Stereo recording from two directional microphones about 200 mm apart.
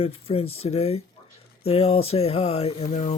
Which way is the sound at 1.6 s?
30° left (ahead or behind).